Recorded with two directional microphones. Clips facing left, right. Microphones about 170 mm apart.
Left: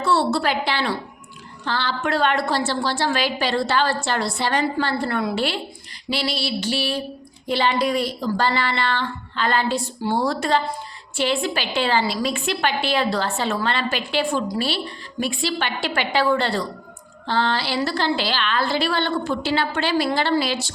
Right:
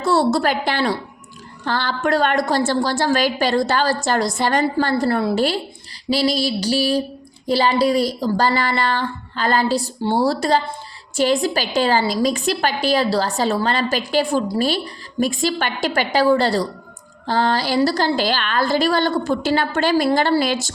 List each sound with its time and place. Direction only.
0.0 s a woman's voice: 45° right (ahead or behind)